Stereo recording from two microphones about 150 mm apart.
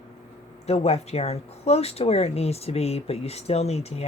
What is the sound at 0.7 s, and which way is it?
Speech, 45° left (ahead or behind).